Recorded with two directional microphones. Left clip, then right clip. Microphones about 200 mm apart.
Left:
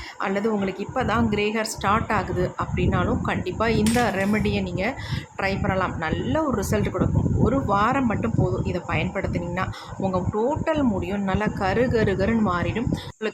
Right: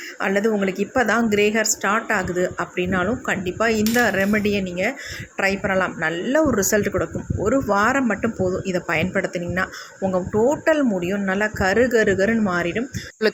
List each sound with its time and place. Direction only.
0.2 s speech: 10° right (ahead or behind)